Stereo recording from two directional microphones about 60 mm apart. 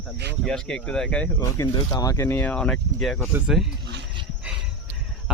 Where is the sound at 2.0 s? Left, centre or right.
Left.